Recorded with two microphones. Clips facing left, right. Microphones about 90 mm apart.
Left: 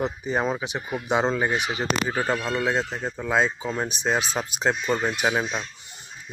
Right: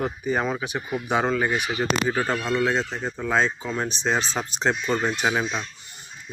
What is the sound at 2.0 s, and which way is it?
Speech, 5° left (ahead or behind).